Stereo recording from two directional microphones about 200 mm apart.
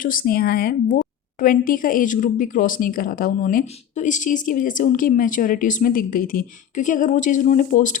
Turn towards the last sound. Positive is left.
turn(degrees=40)  # may be behind; listen again after turning